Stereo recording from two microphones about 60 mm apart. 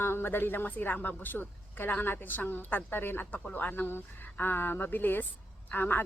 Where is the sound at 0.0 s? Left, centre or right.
Left.